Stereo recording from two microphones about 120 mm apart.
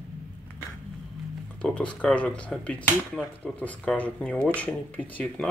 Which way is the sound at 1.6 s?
10° left (ahead or behind).